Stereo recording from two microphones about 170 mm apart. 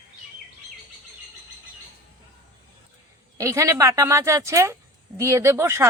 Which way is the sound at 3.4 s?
15° right (ahead or behind).